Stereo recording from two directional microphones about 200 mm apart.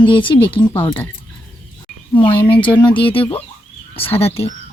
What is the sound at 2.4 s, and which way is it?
Speech, 25° left (ahead or behind).